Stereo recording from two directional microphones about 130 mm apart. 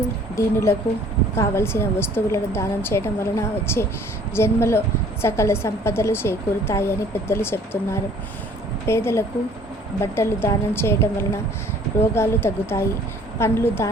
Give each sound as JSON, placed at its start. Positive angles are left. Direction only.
{"t": 0.3, "sound": "a woman's voice", "side_deg": 20}